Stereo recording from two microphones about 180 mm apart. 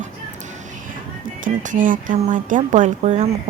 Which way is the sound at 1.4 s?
45° right (ahead or behind).